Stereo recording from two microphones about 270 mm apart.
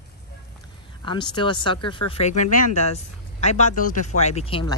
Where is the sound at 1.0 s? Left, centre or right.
Centre.